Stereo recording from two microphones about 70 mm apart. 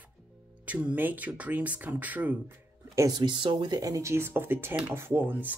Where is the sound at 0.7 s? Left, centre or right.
Right.